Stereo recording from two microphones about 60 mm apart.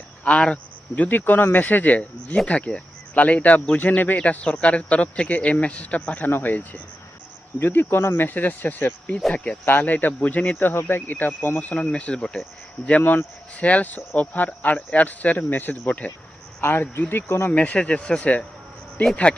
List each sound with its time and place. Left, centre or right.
0.3 s speech: left
7.6 s speech: left
9.3 s speech: left
9.6 s speech: left
11.7 s speech: left
13.0 s speech: left
13.6 s speech: left
16.6 s speech: left
17.5 s speech: left